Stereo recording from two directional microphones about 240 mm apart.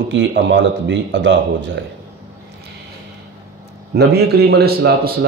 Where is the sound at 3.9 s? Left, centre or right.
Right.